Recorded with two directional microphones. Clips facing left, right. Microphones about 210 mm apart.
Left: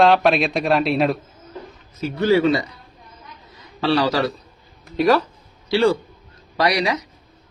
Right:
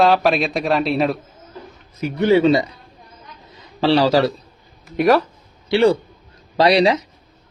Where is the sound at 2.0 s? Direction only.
20° right (ahead or behind).